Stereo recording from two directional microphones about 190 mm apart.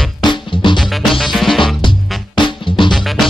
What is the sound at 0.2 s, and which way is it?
Music, 25° left (ahead or behind).